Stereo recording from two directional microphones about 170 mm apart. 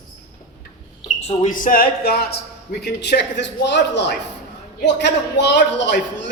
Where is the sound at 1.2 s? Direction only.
45° left (ahead or behind); by 2.2 s 60° left (ahead or behind).